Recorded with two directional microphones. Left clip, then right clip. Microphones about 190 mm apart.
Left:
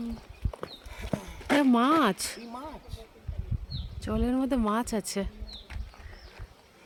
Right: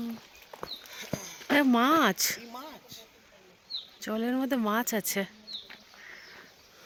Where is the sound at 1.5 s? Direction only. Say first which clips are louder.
Even; 20° right (ahead or behind).